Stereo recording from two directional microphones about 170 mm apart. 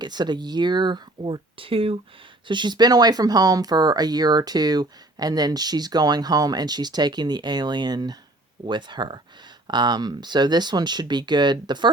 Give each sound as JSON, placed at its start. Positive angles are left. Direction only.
{"t": 0.0, "sound": "speech", "side_deg": -25}